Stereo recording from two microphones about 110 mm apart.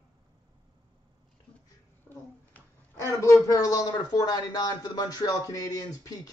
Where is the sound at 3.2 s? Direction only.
30° left (ahead or behind).